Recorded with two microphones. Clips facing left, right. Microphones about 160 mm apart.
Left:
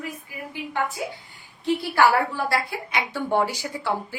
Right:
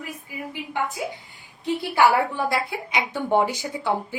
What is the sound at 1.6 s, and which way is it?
A woman's voice, 20° right (ahead or behind).